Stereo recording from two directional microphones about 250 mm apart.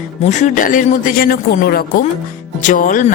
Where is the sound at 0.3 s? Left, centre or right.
Left.